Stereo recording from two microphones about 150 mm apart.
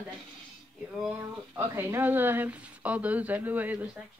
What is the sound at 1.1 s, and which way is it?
Speech, 20° right (ahead or behind).